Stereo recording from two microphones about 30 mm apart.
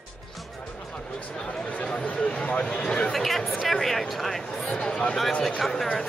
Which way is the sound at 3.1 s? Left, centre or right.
Centre.